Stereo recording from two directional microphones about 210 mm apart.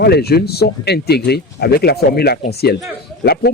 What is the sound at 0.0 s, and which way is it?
Speech, 50° left (ahead or behind).